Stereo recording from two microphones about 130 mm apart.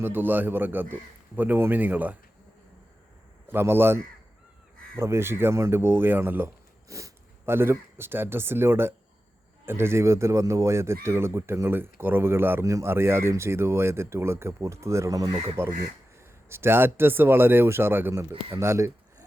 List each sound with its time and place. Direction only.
0.0 s speech: 15° right (ahead or behind)
3.4 s a man's voice: 15° right (ahead or behind)